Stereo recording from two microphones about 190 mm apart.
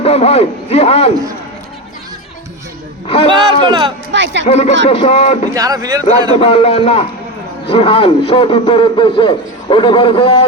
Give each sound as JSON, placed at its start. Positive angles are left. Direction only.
{"t": 0.0, "sound": "a man's voice", "side_deg": 30}
{"t": 3.2, "sound": "speech", "side_deg": -25}
{"t": 4.1, "sound": "a man's voice", "side_deg": -70}
{"t": 4.4, "sound": "a man's voice", "side_deg": 35}
{"t": 5.5, "sound": "speech", "side_deg": -20}
{"t": 6.4, "sound": "a man's voice", "side_deg": 30}